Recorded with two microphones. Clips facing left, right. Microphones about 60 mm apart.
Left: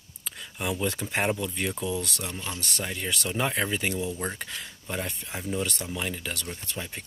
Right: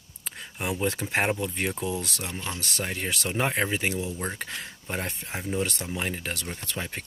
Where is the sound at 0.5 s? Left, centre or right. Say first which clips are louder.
Right 1 dB; right.